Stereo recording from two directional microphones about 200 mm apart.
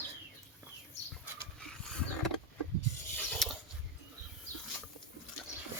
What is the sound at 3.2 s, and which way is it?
Mechanisms, centre (ahead or behind).